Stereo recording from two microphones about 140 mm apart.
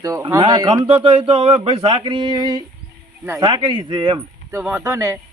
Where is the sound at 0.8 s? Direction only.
40° right (ahead or behind).